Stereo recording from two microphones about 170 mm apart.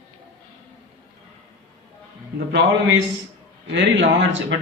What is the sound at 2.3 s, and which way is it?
Speech, 80° right.